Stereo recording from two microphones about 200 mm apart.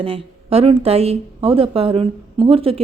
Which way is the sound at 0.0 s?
30° right (ahead or behind).